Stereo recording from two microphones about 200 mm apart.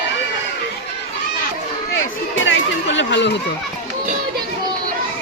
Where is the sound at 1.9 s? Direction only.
70° left (ahead or behind).